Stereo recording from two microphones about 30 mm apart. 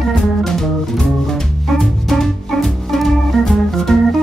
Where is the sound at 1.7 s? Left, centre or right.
Centre.